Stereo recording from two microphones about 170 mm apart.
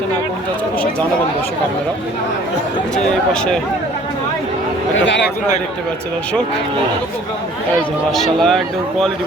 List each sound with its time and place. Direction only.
5.0 s a man's voice: 90° left
7.8 s speech: centre (ahead or behind)